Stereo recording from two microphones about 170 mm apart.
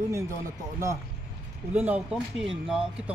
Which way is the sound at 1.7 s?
10° right (ahead or behind).